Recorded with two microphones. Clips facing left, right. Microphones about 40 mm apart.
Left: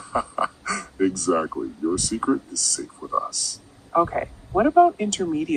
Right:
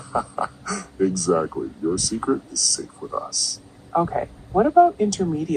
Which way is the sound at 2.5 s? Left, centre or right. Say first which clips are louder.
Right 3 dB; right.